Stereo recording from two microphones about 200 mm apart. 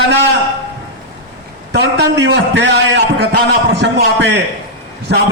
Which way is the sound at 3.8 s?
60° right (ahead or behind).